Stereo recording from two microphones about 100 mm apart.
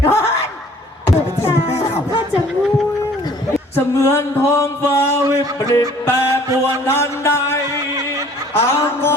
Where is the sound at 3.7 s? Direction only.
25° left (ahead or behind).